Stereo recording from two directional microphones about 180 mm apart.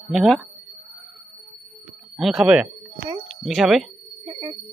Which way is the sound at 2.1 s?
Centre (ahead or behind).